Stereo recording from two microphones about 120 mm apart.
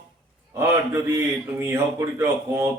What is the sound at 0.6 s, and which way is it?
A man's voice, 25° right (ahead or behind).